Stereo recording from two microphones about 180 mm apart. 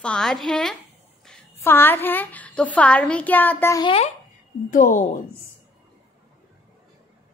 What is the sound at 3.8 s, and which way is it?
Speech, 35° left (ahead or behind).